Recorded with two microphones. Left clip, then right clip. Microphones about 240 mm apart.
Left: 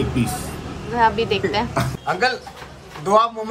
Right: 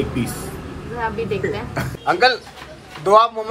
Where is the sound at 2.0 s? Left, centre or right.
Centre.